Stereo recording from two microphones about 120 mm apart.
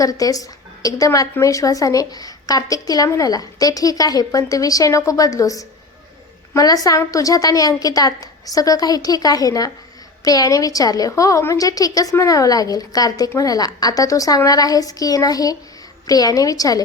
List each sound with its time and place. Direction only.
0.0 s a woman's voice: 30° left (ahead or behind)